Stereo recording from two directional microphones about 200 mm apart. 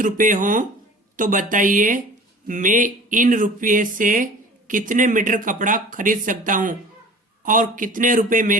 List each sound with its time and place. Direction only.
0.0 s speech: 40° right (ahead or behind)